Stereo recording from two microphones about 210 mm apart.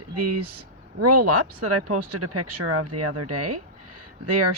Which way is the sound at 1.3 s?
90° right.